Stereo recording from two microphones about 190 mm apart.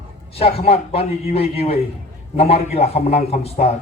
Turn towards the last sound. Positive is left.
turn(degrees=30)  # may be behind; listen again after turning